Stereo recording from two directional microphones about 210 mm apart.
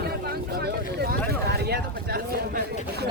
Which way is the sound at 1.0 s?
50° right (ahead or behind).